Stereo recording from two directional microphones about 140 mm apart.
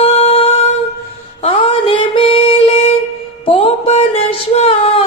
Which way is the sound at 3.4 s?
40° left (ahead or behind).